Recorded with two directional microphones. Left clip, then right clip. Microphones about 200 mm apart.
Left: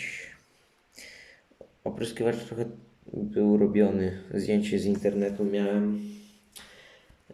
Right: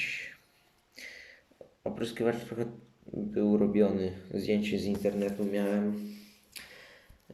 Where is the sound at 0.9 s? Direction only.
5° left (ahead or behind).